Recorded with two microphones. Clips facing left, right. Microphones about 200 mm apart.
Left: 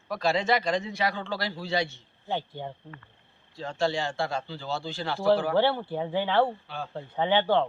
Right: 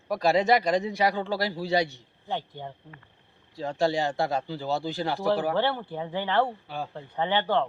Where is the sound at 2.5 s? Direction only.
15° right (ahead or behind).